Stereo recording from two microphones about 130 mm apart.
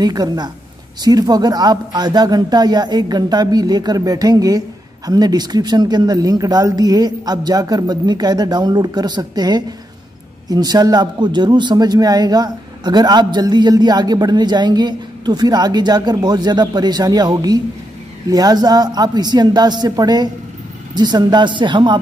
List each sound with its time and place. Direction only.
0.0 s speech: 30° right (ahead or behind)